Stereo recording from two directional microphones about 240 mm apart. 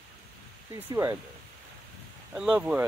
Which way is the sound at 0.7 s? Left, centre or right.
Centre.